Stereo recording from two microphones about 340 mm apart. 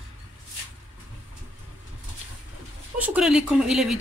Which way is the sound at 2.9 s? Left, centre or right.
Centre.